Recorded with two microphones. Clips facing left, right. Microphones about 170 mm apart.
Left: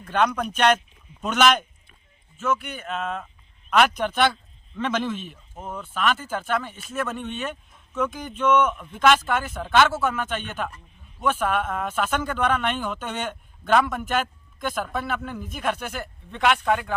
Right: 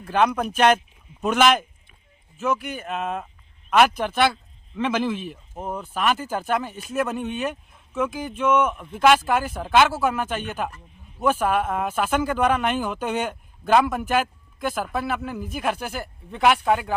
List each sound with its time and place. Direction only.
0.0 s speech: 10° right (ahead or behind)
2.8 s speech: 15° right (ahead or behind)